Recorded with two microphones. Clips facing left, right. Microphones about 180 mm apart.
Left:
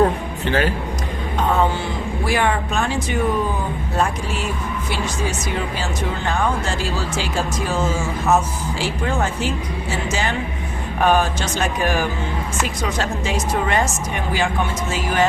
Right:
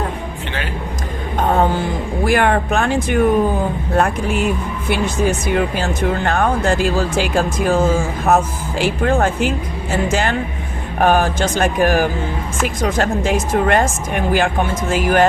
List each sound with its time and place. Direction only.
1.4 s music: 50° right (ahead or behind)
3.9 s speech: 60° right (ahead or behind)